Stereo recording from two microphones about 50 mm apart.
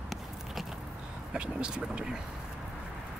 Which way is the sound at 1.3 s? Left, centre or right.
Centre.